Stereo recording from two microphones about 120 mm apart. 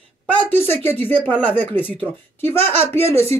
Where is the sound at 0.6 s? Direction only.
55° right (ahead or behind).